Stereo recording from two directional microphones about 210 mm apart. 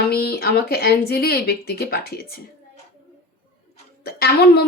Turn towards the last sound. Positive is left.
turn(degrees=50)  # may be behind; listen again after turning